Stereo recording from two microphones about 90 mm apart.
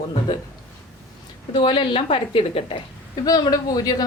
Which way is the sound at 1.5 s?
60° left (ahead or behind).